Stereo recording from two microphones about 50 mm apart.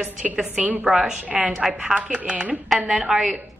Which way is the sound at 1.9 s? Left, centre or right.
Right.